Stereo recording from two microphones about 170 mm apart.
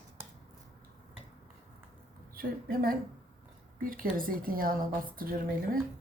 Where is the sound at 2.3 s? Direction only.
60° right (ahead or behind).